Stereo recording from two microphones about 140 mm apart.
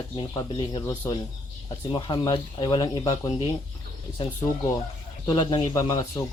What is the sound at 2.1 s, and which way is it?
Speech, 35° left (ahead or behind).